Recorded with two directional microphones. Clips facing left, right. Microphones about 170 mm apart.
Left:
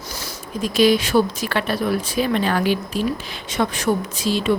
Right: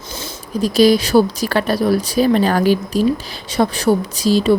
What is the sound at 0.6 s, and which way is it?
Speech, 35° right (ahead or behind).